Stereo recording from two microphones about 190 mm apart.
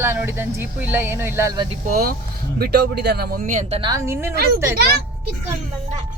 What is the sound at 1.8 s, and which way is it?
Speech, 50° right (ahead or behind).